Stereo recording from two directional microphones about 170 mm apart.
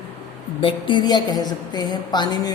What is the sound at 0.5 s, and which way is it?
A woman's voice, 30° left (ahead or behind).